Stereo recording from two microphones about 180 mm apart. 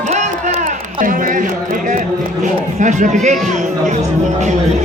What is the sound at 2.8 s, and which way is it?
Speech, 45° right (ahead or behind).